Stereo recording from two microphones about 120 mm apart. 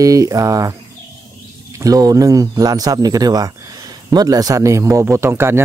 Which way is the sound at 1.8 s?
30° right (ahead or behind).